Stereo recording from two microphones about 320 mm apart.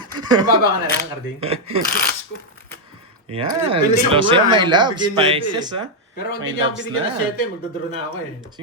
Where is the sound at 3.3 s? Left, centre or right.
Centre.